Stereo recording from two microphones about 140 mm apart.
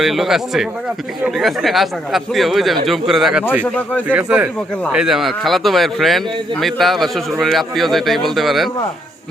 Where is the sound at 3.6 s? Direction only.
10° left (ahead or behind).